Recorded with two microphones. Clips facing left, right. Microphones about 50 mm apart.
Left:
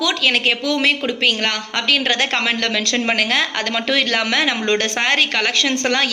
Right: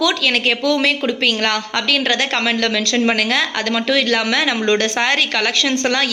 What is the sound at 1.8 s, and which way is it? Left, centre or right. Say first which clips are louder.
A woman's voice: left 2 dB; left.